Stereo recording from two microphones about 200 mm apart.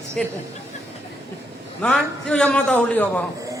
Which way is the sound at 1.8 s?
5° left (ahead or behind).